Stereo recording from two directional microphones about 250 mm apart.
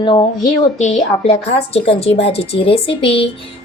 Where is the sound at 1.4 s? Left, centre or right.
Left.